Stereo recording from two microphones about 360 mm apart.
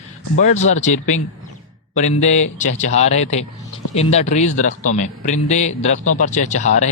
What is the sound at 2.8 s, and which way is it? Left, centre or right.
A man's voice, centre.